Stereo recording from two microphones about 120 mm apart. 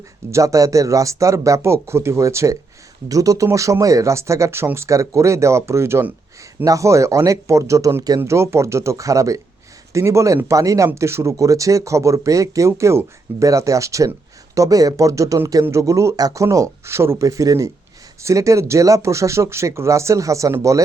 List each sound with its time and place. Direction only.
0.3 s speech: 25° right (ahead or behind)